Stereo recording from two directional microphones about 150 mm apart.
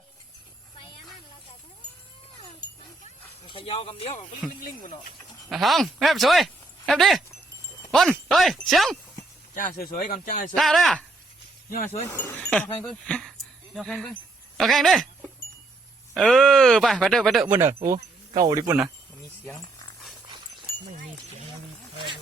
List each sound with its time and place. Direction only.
0.8 s a sound: 35° left (ahead or behind)
3.4 s speech: 35° left (ahead or behind)
4.6 s speech: 60° left (ahead or behind)
5.5 s speech: centre (ahead or behind)
9.6 s speech: 70° left (ahead or behind)
10.5 s speech: centre (ahead or behind)
12.0 s speech: 15° left (ahead or behind)
17.5 s speech: 15° right (ahead or behind)
20.8 s a sound: 45° right (ahead or behind)